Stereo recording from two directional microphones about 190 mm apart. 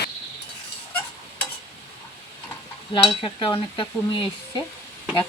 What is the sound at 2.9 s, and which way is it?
Stir, 25° left (ahead or behind).